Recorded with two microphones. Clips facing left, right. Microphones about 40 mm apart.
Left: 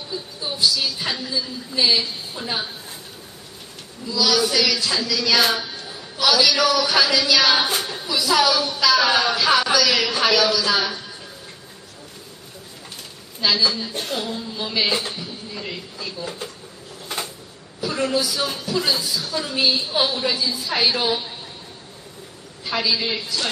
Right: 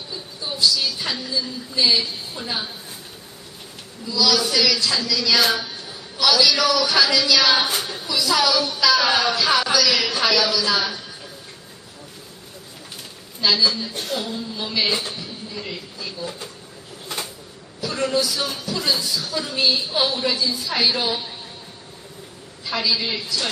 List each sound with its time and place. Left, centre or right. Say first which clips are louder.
0.1 s a woman's voice: left 2 dB; centre
4.0 s a woman's voice: even; centre
13.4 s a woman's voice: right 1 dB; centre
13.9 s a woman's voice: even; left
14.3 s a woman's voice: even; centre
15.1 s a sound: even; centre
17.8 s a woman's voice: even; centre
22.6 s a woman's voice: left 1 dB; centre